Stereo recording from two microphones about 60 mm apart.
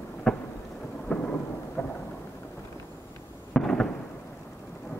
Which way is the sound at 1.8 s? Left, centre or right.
Left.